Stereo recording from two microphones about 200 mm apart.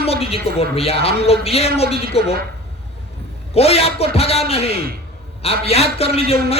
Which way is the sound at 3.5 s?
30° left (ahead or behind).